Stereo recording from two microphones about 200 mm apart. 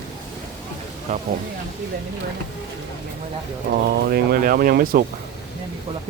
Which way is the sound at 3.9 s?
55° right (ahead or behind).